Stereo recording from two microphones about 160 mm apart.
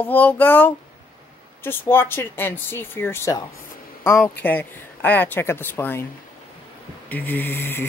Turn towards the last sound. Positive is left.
turn(degrees=15)  # may be behind; listen again after turning